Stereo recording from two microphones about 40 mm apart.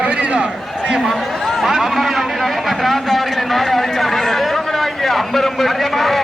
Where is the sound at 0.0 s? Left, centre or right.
Right.